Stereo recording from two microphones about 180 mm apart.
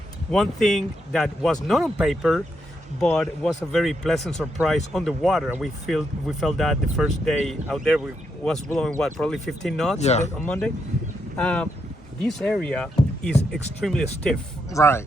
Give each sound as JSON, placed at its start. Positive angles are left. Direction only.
{"t": 0.3, "sound": "speech", "side_deg": 5}
{"t": 10.0, "sound": "speech", "side_deg": 40}
{"t": 10.3, "sound": "speech", "side_deg": 5}
{"t": 14.7, "sound": "speech", "side_deg": 15}